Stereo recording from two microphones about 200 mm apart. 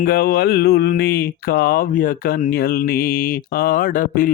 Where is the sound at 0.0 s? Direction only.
50° left (ahead or behind).